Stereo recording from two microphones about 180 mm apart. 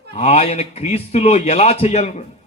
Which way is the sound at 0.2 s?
35° left (ahead or behind).